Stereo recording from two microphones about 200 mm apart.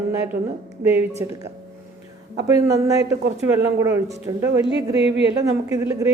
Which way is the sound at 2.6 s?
15° right (ahead or behind).